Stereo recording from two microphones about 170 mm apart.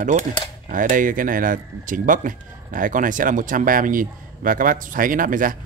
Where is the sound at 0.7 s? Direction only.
50° right (ahead or behind).